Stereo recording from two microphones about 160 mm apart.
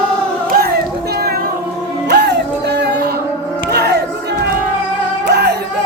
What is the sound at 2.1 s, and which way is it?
Music, 90° right.